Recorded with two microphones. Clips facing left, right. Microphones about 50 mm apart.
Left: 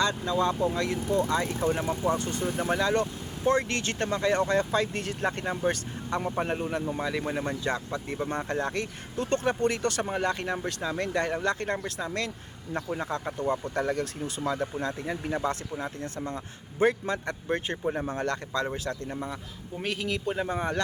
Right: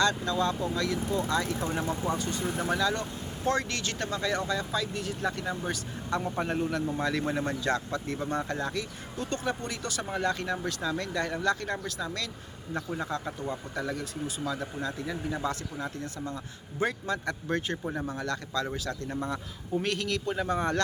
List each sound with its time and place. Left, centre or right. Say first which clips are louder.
0.0 s speech: left 1 dB; left
1.5 s speech: left 3 dB; centre
2.1 s speech: left 2 dB; left
2.4 s speech: left 2 dB; centre
2.6 s speech: left 3 dB; left
6.4 s speech: even; left
10.1 s speech: left 1 dB; left
13.5 s speech: left 7 dB; left
14.4 s speech: left 5 dB; left
16.8 s speech: left 4 dB; left
18.1 s speech: left 3 dB; left
19.0 s speech: right 2 dB; centre